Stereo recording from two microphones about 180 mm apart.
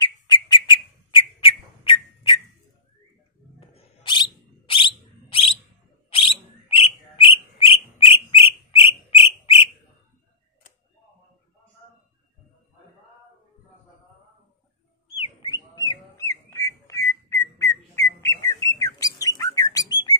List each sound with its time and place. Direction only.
0.0 s bird: 25° left (ahead or behind)
3.5 s bird: 30° left (ahead or behind)
15.1 s a sound: 25° left (ahead or behind)
15.9 s bird: 15° left (ahead or behind)
18.2 s bird: 20° left (ahead or behind)